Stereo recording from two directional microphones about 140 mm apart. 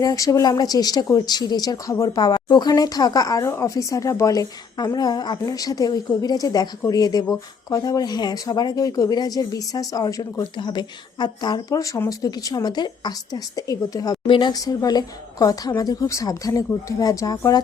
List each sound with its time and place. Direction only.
0.0 s speech: 25° left (ahead or behind)